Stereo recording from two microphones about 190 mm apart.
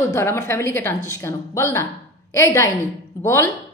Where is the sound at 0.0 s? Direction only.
15° left (ahead or behind).